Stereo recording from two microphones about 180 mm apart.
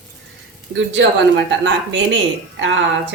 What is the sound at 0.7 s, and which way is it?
Speech, 90° right.